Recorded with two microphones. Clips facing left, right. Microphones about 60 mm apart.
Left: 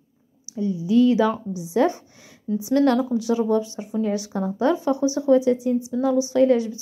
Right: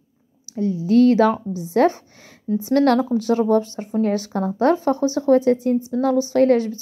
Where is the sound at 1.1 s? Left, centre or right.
Right.